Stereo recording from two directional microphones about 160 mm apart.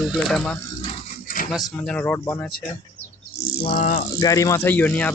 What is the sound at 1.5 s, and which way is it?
Speech, 5° left (ahead or behind).